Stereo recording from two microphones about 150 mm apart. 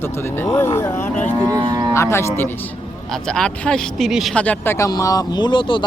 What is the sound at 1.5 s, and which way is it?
Moo, 25° right (ahead or behind).